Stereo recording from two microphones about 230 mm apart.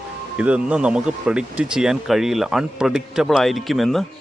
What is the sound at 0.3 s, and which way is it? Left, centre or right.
Speech, centre.